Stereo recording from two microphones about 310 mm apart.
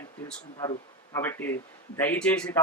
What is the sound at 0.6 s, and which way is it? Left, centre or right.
Speech, centre.